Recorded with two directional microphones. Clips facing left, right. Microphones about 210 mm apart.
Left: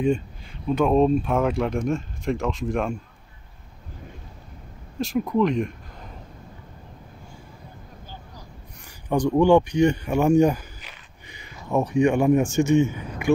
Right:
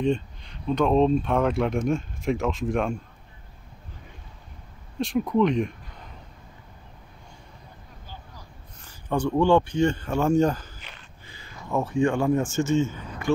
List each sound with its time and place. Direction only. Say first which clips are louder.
0.0 s speech: left 2 dB; 5° left (ahead or behind)
4.9 s speech: even; centre (ahead or behind)
9.1 s speech: left 3 dB; 15° left (ahead or behind)